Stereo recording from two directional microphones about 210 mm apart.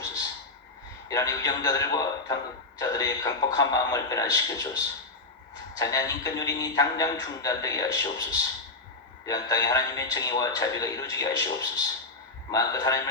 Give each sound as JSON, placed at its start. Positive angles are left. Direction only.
{"t": 0.0, "sound": "a sound", "side_deg": 15}
{"t": 1.0, "sound": "a man's voice", "side_deg": 15}
{"t": 5.7, "sound": "a man's voice", "side_deg": 15}